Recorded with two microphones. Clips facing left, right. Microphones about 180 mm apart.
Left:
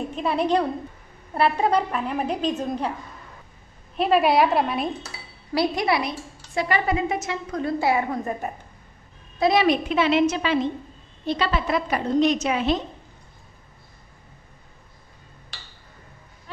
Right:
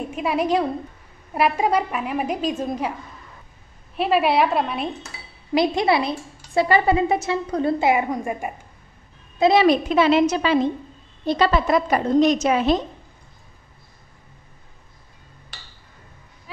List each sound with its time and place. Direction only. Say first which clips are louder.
0.0 s a woman's voice: right 1 dB; 10° right (ahead or behind)
3.9 s a woman's voice: even; 5° right (ahead or behind)
5.5 s a woman's voice: right 3 dB; 20° right (ahead or behind)
9.4 s a woman's voice: right 4 dB; 30° right (ahead or behind)